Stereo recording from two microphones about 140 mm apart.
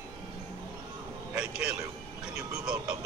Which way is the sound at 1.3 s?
5° right (ahead or behind).